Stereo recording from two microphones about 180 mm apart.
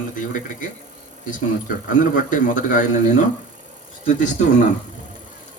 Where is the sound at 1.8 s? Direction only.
45° left (ahead or behind).